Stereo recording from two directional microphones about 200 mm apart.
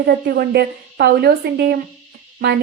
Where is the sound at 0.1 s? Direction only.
55° right (ahead or behind).